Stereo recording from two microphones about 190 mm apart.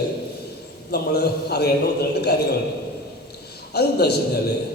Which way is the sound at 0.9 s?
55° left (ahead or behind).